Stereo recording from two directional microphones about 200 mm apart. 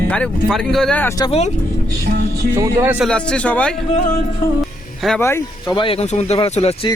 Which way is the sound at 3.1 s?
5° left (ahead or behind).